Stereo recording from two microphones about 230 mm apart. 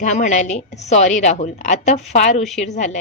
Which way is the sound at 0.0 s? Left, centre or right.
Left.